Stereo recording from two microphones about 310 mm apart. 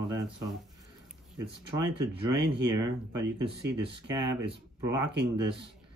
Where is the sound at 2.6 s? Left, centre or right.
Centre.